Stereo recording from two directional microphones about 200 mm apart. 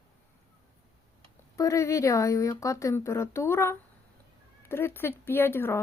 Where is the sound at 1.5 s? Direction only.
15° left (ahead or behind).